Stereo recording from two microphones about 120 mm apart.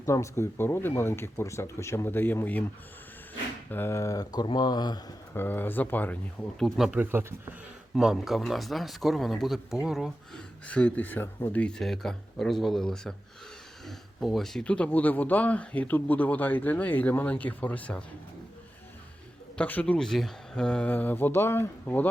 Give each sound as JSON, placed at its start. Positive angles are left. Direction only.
{"t": 0.0, "sound": "speech", "side_deg": 25}
{"t": 3.7, "sound": "speech", "side_deg": 20}
{"t": 5.3, "sound": "speech", "side_deg": 15}
{"t": 6.6, "sound": "speech", "side_deg": 0}
{"t": 7.0, "sound": "speech", "side_deg": -20}
{"t": 7.9, "sound": "speech", "side_deg": -5}
{"t": 10.7, "sound": "speech", "side_deg": 10}
{"t": 11.6, "sound": "speech", "side_deg": 5}
{"t": 19.5, "sound": "speech", "side_deg": 10}